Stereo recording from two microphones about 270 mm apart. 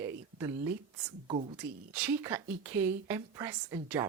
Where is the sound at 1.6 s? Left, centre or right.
Centre.